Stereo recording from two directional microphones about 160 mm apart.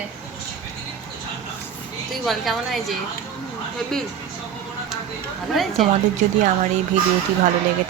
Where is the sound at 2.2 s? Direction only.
Centre (ahead or behind).